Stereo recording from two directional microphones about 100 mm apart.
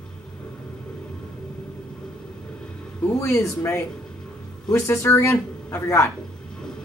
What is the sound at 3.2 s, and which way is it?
Speech, 30° left (ahead or behind).